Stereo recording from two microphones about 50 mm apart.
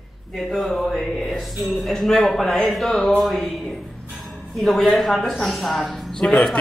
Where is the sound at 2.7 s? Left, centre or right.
Centre.